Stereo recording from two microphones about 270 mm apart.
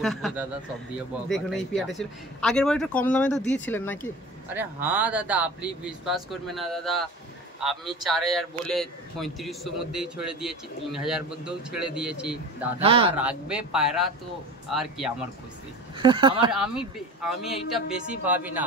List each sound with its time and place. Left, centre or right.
0.0 s speech: centre
4.6 s speech: centre
12.8 s speech: centre
13.1 s speech: centre
16.0 s speech: centre
16.5 s speech: centre